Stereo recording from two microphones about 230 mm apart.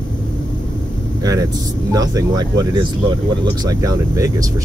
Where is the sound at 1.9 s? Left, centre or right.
Centre.